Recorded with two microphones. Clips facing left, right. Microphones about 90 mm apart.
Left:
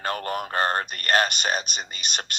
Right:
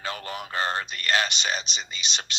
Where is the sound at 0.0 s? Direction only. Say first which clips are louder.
Left 5 dB; 50° left (ahead or behind).